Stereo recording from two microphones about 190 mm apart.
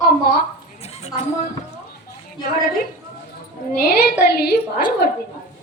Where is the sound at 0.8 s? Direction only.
35° left (ahead or behind).